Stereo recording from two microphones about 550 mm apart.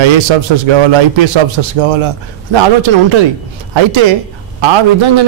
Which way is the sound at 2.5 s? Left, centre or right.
Right.